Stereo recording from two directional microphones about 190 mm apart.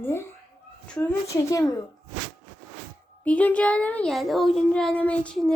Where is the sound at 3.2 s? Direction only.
5° left (ahead or behind).